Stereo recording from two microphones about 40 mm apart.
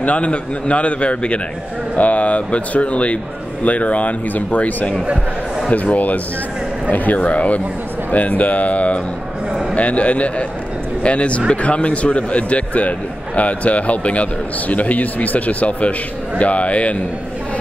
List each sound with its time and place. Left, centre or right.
0.0 s a man's voice: left